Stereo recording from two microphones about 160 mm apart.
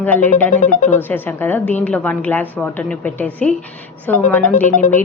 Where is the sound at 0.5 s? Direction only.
50° left (ahead or behind).